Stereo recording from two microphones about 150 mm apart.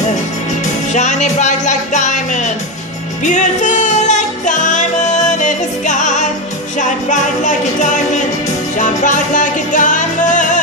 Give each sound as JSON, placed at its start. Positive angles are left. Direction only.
{"t": 0.9, "sound": "music", "side_deg": 50}
{"t": 8.7, "sound": "music", "side_deg": 60}